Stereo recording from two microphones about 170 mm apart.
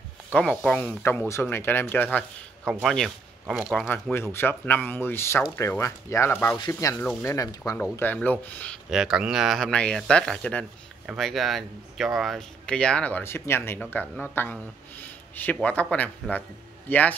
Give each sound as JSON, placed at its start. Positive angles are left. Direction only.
{"t": 0.3, "sound": "speech", "side_deg": 5}
{"t": 2.6, "sound": "speech", "side_deg": 0}
{"t": 3.9, "sound": "speech", "side_deg": 15}
{"t": 8.9, "sound": "speech", "side_deg": -5}